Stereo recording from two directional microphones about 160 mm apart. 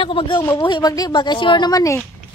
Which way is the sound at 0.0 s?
30° left (ahead or behind).